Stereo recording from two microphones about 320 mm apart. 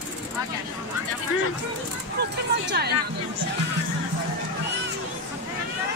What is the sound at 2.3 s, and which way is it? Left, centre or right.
Speech, right.